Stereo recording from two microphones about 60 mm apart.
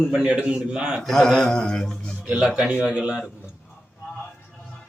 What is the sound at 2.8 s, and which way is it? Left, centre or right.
Speech, centre.